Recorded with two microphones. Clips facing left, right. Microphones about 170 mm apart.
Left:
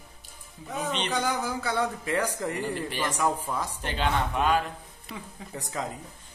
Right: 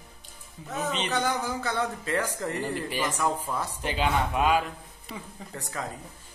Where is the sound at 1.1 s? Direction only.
10° left (ahead or behind).